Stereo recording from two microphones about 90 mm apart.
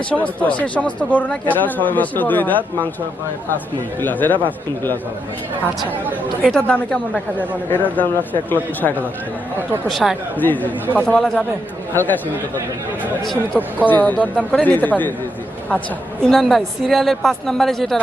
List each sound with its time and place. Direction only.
0.1 s speech: 15° left (ahead or behind)
4.0 s speech: 20° left (ahead or behind)
6.4 s a woman's voice: 15° left (ahead or behind)
9.9 s a woman's voice: centre (ahead or behind)
10.3 s a woman's voice: 20° left (ahead or behind)
13.8 s speech: 20° left (ahead or behind)
16.2 s a woman's voice: centre (ahead or behind)